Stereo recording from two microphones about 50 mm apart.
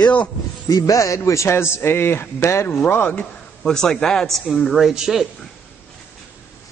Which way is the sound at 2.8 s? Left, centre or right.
Left.